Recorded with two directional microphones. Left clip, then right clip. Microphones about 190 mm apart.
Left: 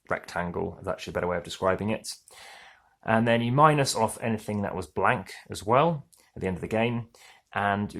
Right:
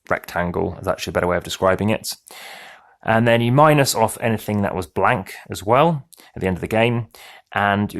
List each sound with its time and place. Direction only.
0.1 s speech: 30° right (ahead or behind)